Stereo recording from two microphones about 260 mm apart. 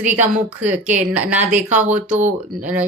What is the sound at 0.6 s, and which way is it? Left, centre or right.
Speech, centre.